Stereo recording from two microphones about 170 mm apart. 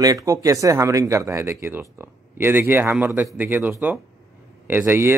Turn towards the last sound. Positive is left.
turn(degrees=-15)  # may be behind; listen again after turning